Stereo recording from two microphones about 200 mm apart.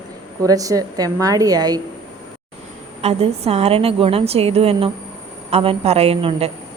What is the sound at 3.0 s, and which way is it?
A woman's voice, 30° right (ahead or behind).